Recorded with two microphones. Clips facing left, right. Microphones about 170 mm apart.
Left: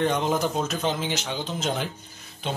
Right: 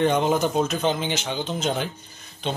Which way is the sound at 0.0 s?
Centre (ahead or behind).